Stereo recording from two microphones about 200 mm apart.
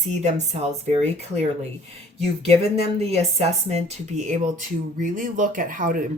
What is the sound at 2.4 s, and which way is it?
Speech, 30° right (ahead or behind).